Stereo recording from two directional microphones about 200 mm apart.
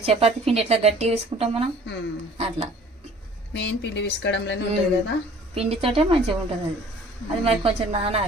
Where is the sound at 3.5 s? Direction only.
60° left (ahead or behind).